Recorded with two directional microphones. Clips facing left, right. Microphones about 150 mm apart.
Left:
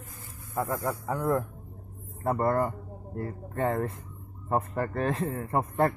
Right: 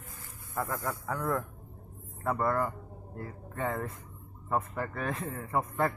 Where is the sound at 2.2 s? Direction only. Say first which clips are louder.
Left 4 dB; 40° left (ahead or behind).